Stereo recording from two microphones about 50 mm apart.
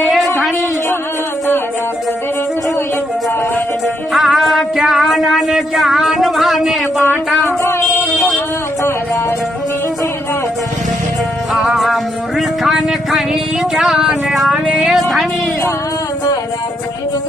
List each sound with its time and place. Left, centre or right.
4.1 s music: centre
8.1 s a sound: left
11.5 s music: centre